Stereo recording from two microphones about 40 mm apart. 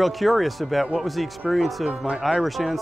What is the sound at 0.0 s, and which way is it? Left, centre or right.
Speech, centre.